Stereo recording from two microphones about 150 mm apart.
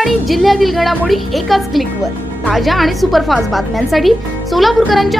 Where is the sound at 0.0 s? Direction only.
Centre (ahead or behind).